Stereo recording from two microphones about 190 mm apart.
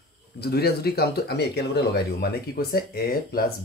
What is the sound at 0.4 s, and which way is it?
Speech, 55° left (ahead or behind).